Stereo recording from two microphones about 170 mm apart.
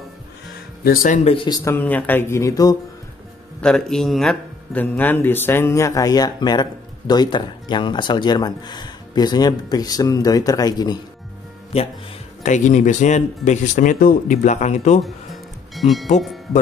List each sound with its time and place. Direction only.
0.8 s speech: 50° left (ahead or behind)
1.3 s speech: 30° left (ahead or behind)
1.6 s speech: 15° left (ahead or behind)
3.6 s speech: 5° left (ahead or behind); by 11.0 s 25° left (ahead or behind)
11.7 s speech: 35° left (ahead or behind)
15.7 s speech: centre (ahead or behind)